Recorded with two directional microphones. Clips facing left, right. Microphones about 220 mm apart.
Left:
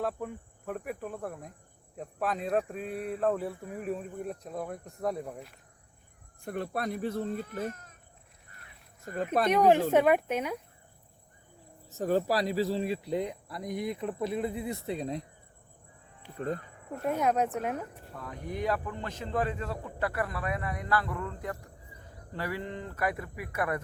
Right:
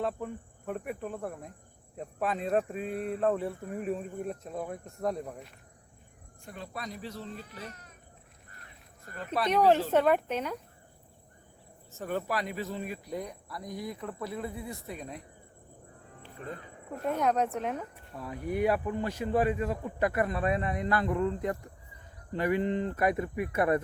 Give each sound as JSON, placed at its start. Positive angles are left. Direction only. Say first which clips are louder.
{"t": 0.0, "sound": "speech", "louder": "even", "side_deg": 0}
{"t": 6.4, "sound": "speech", "louder": "left 8 dB", "side_deg": 55}
{"t": 9.1, "sound": "speech", "louder": "left 4 dB", "side_deg": 50}
{"t": 9.5, "sound": "speech", "louder": "left 1 dB", "side_deg": 10}
{"t": 11.9, "sound": "speech", "louder": "left 6 dB", "side_deg": 35}
{"t": 16.4, "sound": "speech", "louder": "left 8 dB", "side_deg": 40}
{"t": 16.9, "sound": "speech", "louder": "even", "side_deg": 5}